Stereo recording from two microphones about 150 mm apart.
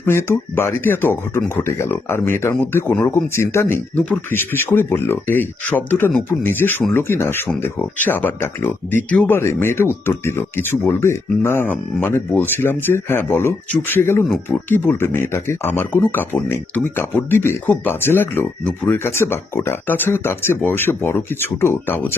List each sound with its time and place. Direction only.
0.0 s speech: 15° left (ahead or behind)